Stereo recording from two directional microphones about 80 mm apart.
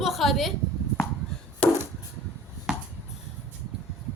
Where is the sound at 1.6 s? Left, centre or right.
Centre.